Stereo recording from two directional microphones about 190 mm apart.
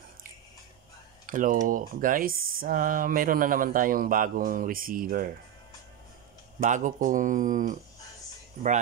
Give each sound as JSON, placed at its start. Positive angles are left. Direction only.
{"t": 1.2, "sound": "speech", "side_deg": -45}
{"t": 6.6, "sound": "speech", "side_deg": -40}